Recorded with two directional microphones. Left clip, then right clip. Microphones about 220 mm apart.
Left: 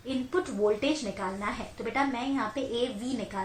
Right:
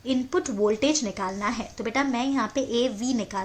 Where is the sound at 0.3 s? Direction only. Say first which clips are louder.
Right 1 dB; 50° right (ahead or behind).